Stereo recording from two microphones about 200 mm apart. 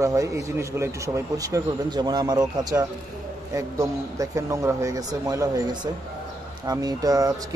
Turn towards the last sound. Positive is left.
turn(degrees=-15)  # may be behind; listen again after turning